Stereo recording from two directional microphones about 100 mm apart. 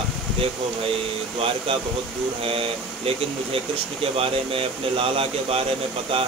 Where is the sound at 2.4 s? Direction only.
70° right (ahead or behind).